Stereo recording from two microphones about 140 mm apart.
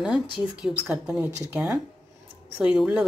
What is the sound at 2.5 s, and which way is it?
Speech, 10° right (ahead or behind).